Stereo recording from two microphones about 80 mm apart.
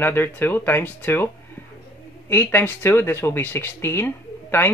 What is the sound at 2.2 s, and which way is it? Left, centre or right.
Speech, left.